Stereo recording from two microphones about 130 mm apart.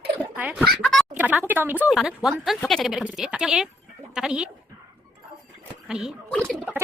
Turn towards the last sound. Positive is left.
turn(degrees=0)  # may be behind; listen again after turning